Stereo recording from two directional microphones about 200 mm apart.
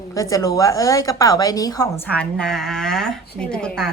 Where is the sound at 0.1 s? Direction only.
15° left (ahead or behind).